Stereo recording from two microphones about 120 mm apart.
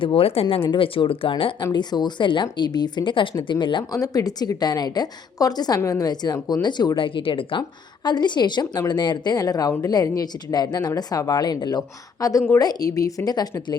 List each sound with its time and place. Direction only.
0.0 s a woman's voice: 50° left (ahead or behind)
3.9 s a woman's voice: 30° left (ahead or behind)